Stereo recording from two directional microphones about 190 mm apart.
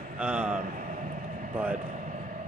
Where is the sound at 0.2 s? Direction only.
5° right (ahead or behind).